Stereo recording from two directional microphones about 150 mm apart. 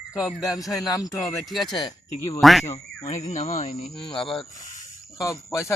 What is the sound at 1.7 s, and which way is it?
Speech, 30° left (ahead or behind).